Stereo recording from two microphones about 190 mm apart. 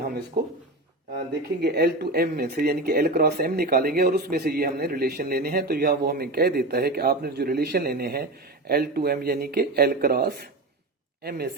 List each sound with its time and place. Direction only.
1.3 s speech: 60° right (ahead or behind)